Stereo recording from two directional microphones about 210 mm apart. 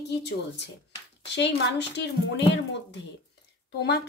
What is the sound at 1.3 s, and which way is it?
Speech, 55° left (ahead or behind).